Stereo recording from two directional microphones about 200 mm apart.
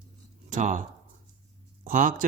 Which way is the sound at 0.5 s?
40° right (ahead or behind).